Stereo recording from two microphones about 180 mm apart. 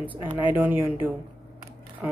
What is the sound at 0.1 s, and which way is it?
A woman's voice, 10° right (ahead or behind).